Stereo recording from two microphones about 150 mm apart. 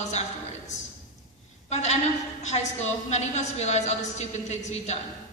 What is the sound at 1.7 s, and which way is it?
A woman's voice, 50° left (ahead or behind).